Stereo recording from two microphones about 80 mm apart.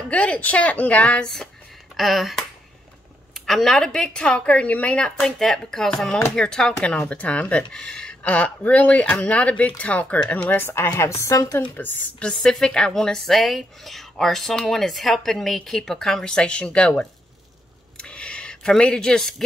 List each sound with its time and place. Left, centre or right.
0.1 s speech: centre
2.0 s a woman's voice: centre; by 10.9 s left
10.9 s speech: left
11.7 s speech: left
12.3 s a woman's voice: centre
17.9 s a sound: centre